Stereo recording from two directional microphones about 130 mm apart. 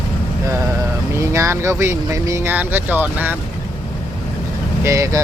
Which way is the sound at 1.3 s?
20° right (ahead or behind).